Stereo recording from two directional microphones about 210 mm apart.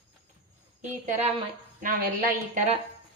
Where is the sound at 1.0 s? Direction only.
35° right (ahead or behind).